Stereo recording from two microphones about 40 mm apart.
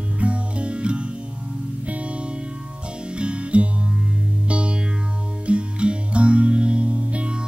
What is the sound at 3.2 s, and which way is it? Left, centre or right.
Music, right.